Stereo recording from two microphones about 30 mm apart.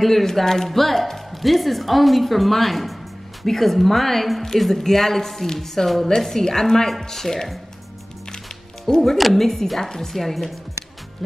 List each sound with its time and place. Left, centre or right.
0.0 s a woman's voice: centre
8.9 s speech: centre
9.2 s a woman's voice: centre